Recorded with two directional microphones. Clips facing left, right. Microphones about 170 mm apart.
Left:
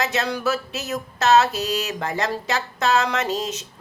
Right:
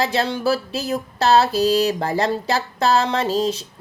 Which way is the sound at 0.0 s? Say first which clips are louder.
Right 3 dB; 30° right (ahead or behind).